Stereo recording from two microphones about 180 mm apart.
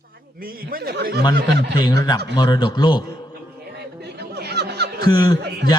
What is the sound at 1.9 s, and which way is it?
A man's voice, 20° left (ahead or behind).